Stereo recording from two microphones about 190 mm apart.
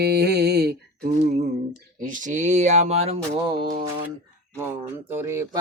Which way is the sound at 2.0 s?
45° right (ahead or behind).